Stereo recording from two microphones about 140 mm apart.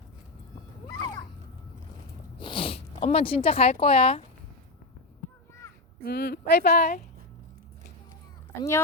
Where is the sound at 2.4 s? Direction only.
40° left (ahead or behind).